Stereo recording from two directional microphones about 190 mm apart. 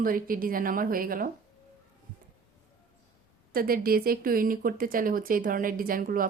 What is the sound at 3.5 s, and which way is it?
Speech, 50° right (ahead or behind).